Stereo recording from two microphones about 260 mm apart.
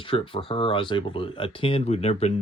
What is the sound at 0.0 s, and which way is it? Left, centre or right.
Speech, centre.